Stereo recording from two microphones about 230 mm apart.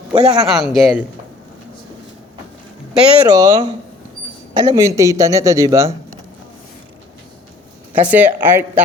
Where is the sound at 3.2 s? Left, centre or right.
Centre.